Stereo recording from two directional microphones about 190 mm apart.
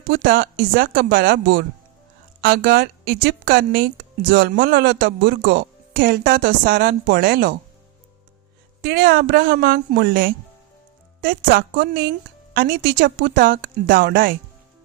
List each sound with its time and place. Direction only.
0.1 s speech: 55° right (ahead or behind)
4.3 s speech: 70° right (ahead or behind)
8.8 s speech: 55° right (ahead or behind)